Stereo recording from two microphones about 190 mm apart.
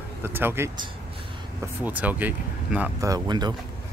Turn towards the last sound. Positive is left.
turn(degrees=-20)  # may be behind; listen again after turning